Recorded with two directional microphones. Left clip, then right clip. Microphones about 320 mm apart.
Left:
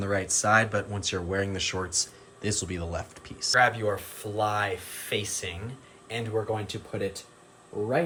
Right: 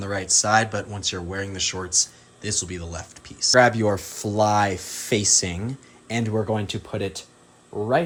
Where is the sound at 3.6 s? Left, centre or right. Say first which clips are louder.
Right 5 dB; centre.